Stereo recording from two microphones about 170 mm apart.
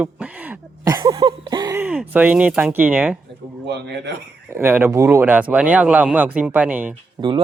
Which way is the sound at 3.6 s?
85° right.